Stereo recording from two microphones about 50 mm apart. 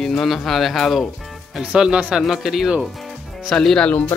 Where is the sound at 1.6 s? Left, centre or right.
Centre.